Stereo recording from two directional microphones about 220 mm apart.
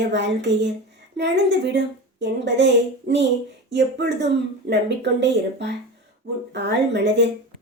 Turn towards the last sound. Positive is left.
turn(degrees=-50)  # may be behind; listen again after turning